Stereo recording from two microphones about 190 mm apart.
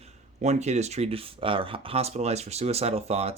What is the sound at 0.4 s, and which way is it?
Speech, 35° right (ahead or behind).